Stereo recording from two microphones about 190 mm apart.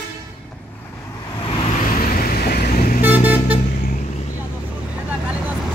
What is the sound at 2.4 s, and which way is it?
Vehicle, 55° left (ahead or behind).